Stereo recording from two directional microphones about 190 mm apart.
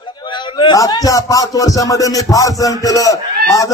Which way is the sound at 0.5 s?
20° left (ahead or behind).